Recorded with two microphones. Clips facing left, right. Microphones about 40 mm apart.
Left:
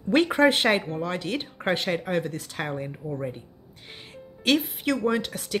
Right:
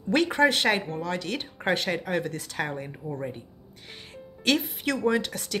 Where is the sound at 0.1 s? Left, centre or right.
Centre.